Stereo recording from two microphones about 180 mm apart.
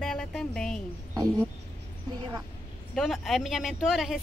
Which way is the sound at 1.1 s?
20° right (ahead or behind).